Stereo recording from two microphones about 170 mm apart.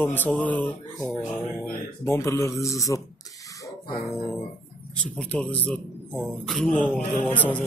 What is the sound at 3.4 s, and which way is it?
Music, 20° left (ahead or behind).